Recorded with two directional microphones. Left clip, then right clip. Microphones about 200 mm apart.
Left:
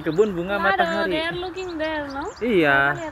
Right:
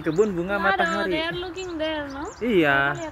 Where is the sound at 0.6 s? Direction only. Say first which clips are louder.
Left 2 dB; 10° left (ahead or behind).